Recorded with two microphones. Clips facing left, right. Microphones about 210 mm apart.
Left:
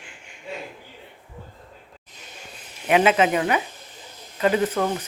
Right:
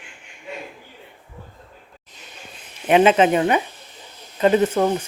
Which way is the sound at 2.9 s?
30° right (ahead or behind).